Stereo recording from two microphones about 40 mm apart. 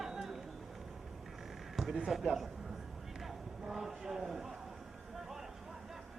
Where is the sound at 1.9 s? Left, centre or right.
Centre.